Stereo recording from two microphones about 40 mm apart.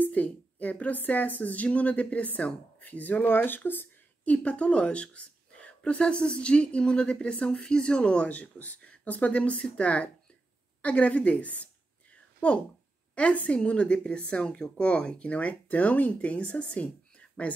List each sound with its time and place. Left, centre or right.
0.0 s a woman's voice: left
3.3 s speech: left
4.3 s a woman's voice: left
13.1 s a woman's voice: left
15.2 s a woman's voice: left